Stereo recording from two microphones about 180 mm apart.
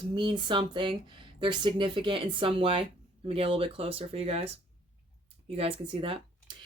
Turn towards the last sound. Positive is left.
turn(degrees=-30)  # may be behind; listen again after turning